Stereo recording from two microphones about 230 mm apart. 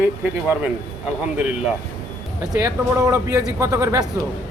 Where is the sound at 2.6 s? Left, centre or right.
Centre.